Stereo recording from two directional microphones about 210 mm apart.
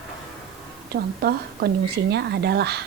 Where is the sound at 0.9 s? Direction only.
50° right (ahead or behind).